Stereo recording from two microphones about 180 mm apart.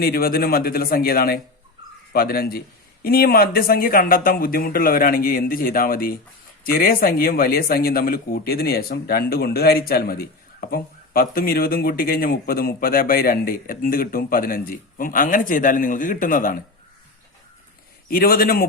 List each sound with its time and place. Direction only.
0.0 s speech: 55° left (ahead or behind)
18.1 s speech: 55° left (ahead or behind)